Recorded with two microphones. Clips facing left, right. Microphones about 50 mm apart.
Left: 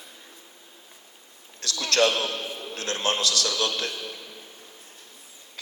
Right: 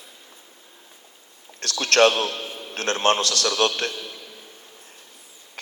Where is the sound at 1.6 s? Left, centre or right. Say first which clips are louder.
Right 5 dB; right.